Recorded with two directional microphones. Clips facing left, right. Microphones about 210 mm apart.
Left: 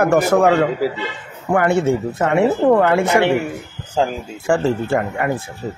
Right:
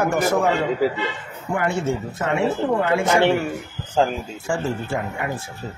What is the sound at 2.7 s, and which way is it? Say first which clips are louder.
Speech: left 7 dB; 60° left (ahead or behind).